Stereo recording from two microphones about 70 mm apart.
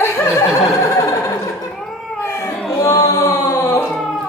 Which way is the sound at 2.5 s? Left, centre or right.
Centre.